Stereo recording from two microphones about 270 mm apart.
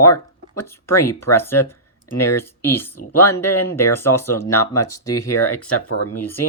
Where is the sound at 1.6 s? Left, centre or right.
Left.